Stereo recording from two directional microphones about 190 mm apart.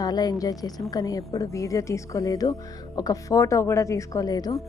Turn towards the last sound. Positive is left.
turn(degrees=20)  # may be behind; listen again after turning